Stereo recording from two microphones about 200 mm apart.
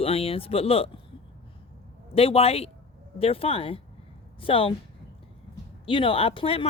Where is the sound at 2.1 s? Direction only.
30° left (ahead or behind).